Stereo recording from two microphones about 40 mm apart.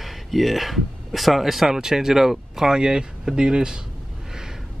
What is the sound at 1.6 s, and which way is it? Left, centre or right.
Speech, centre.